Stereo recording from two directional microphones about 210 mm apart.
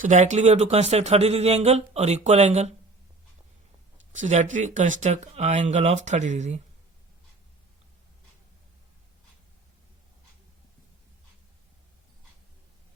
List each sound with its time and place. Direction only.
0.0 s speech: 35° right (ahead or behind)
4.1 s speech: 35° right (ahead or behind)